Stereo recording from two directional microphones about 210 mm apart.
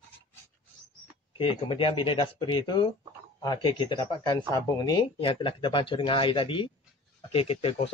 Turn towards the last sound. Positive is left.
turn(degrees=25)  # may be behind; listen again after turning